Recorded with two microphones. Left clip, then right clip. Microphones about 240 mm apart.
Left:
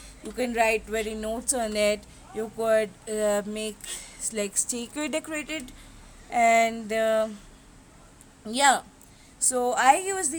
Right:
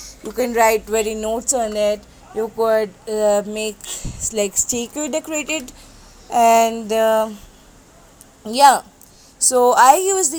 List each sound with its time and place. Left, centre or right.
0.2 s speech: centre
1.6 s a woman's voice: centre
2.8 s speech: centre
8.4 s speech: centre